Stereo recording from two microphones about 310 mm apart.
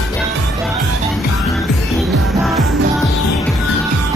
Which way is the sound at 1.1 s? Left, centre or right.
Centre.